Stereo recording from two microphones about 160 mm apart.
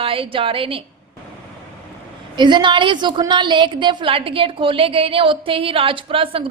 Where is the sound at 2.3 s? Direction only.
30° right (ahead or behind).